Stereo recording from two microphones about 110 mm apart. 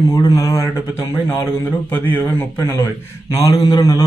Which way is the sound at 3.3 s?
35° left (ahead or behind).